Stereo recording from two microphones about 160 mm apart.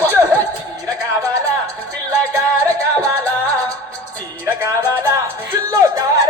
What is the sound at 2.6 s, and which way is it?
Music, 20° right (ahead or behind).